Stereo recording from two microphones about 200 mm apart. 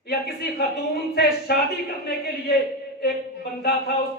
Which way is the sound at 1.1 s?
50° left (ahead or behind).